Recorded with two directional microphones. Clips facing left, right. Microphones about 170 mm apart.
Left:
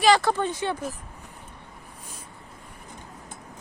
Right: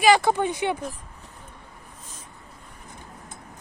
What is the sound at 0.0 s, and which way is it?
Speech, 15° right (ahead or behind).